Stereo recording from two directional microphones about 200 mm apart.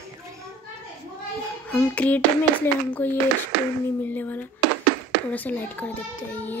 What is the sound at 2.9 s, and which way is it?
Speech, 10° left (ahead or behind).